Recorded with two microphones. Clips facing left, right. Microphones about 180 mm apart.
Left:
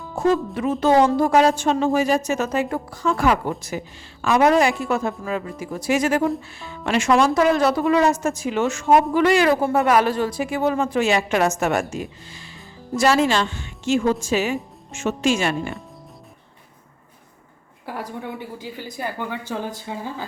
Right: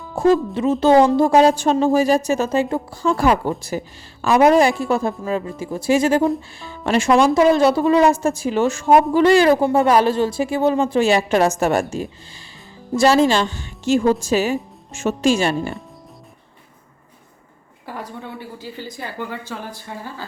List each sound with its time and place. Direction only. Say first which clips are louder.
0.2 s a woman's voice: right 4 dB; 30° right (ahead or behind)
17.8 s speech: left 1 dB; 10° left (ahead or behind)